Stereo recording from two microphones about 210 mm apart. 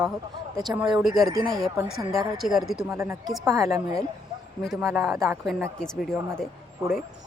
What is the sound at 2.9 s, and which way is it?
Speech, 15° right (ahead or behind).